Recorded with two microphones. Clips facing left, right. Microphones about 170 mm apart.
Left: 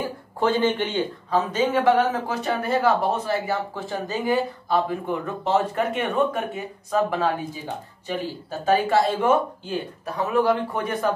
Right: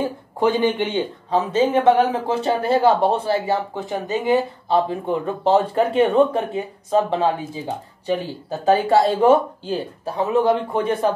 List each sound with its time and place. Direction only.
0.0 s speech: 15° right (ahead or behind)